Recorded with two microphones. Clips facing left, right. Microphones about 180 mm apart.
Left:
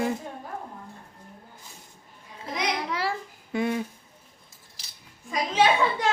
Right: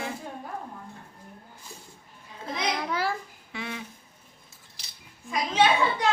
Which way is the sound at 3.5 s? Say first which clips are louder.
Left 10 dB; 45° left (ahead or behind).